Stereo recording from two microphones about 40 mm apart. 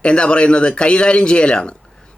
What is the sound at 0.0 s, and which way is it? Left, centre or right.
A man's voice, left.